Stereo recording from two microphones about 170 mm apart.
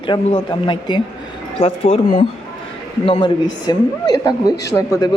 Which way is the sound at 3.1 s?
30° left (ahead or behind).